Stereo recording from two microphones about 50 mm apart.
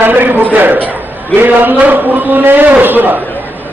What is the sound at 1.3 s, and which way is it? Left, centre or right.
A man's voice, right.